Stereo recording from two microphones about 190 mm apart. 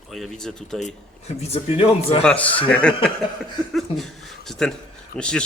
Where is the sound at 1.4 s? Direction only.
35° left (ahead or behind).